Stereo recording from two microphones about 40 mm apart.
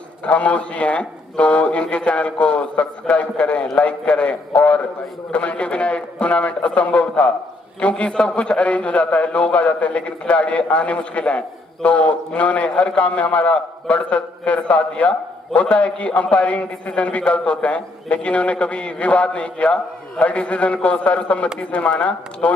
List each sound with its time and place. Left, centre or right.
0.2 s a man's voice: left